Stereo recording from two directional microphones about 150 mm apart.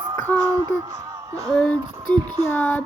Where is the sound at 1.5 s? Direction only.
5° left (ahead or behind).